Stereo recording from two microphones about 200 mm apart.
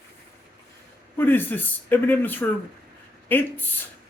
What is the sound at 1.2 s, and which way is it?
Speech, 10° left (ahead or behind).